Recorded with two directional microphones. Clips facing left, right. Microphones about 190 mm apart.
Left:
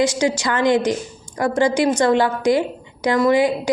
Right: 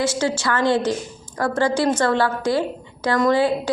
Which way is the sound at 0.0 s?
15° left (ahead or behind).